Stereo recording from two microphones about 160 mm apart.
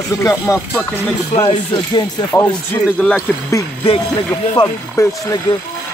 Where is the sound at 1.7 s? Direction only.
25° left (ahead or behind).